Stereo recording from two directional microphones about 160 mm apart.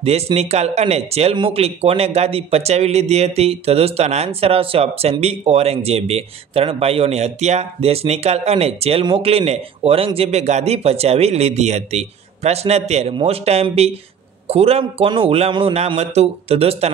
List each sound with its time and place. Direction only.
0.0 s speech: 40° right (ahead or behind)